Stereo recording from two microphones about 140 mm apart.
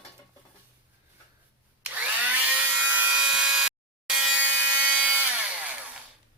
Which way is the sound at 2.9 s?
10° right (ahead or behind).